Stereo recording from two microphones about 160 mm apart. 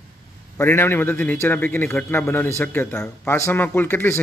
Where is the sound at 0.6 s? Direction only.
15° left (ahead or behind).